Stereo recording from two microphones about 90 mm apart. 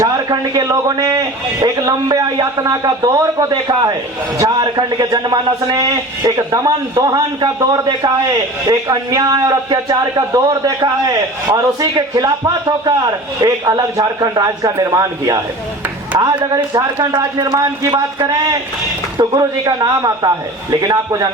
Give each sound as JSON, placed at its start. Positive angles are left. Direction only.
{"t": 0.3, "sound": "a man's voice", "side_deg": -45}
{"t": 8.6, "sound": "a man's voice", "side_deg": -40}
{"t": 17.5, "sound": "speech", "side_deg": -35}
{"t": 19.2, "sound": "a man's voice", "side_deg": -45}